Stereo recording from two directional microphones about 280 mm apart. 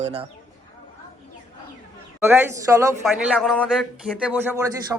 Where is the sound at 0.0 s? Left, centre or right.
Right.